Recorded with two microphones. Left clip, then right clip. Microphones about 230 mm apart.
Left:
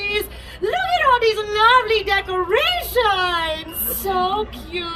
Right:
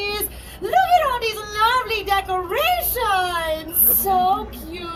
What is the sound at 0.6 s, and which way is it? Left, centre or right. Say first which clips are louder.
Speech: even; centre.